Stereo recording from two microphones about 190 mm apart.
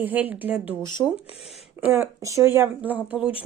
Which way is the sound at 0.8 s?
20° left (ahead or behind).